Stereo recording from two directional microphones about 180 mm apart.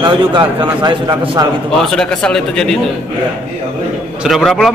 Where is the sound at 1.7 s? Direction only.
5° left (ahead or behind).